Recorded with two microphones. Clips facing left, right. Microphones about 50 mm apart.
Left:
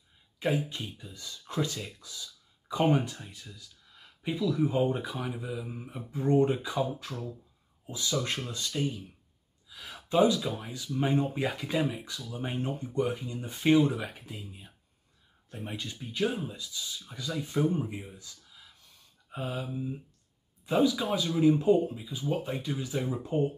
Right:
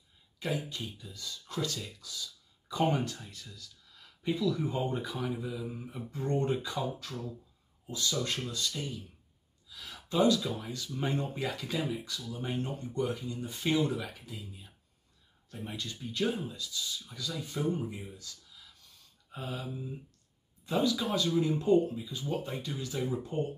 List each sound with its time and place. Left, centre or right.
0.4 s speech: left
18.1 s a sound: left
19.3 s speech: centre